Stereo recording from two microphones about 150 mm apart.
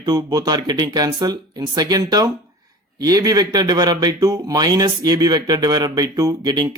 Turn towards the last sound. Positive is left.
turn(degrees=-30)  # may be behind; listen again after turning